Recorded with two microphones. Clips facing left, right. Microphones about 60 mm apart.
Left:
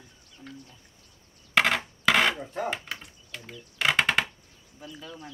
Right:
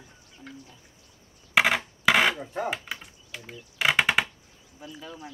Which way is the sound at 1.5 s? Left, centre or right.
Centre.